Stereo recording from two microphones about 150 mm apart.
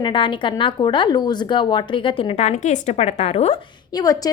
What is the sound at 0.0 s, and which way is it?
Speech, 35° left (ahead or behind).